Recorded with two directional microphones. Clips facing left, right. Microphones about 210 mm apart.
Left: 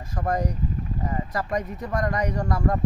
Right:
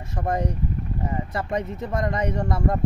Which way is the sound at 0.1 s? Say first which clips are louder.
Even; 25° right (ahead or behind).